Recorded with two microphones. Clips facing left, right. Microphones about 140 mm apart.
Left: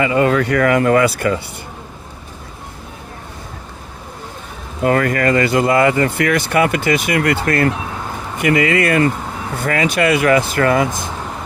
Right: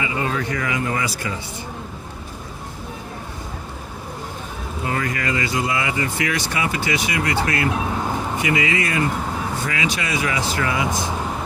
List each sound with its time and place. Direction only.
0.0 s speech: 65° left (ahead or behind)
4.8 s speech: 65° left (ahead or behind)